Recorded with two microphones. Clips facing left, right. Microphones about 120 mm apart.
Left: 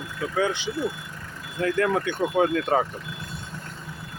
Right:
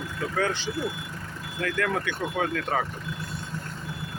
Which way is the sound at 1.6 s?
30° left (ahead or behind).